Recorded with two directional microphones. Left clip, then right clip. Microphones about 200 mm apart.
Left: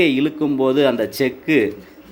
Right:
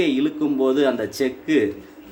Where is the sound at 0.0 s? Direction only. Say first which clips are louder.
Left 4 dB; 20° left (ahead or behind).